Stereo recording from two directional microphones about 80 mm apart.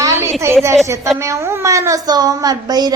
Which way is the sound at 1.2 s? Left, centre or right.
Right.